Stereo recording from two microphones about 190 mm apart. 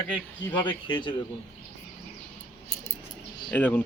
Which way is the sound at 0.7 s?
25° left (ahead or behind).